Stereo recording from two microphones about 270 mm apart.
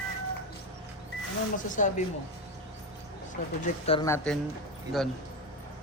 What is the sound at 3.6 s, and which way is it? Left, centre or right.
Speech, centre.